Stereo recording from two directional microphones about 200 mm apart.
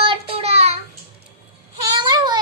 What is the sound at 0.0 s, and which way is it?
Child singing, 30° right (ahead or behind).